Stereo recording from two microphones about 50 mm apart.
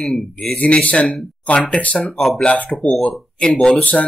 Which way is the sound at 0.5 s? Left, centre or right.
Left.